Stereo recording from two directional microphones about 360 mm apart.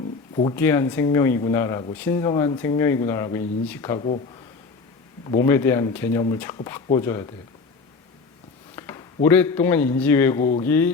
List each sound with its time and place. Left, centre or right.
0.3 s speech: centre
5.3 s speech: centre
8.7 s a man's voice: centre